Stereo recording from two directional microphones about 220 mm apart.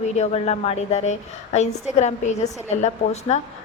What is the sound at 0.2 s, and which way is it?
A woman's voice, 30° left (ahead or behind).